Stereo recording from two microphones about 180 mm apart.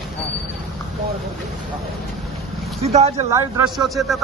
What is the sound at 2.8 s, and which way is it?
Speech, 35° right (ahead or behind).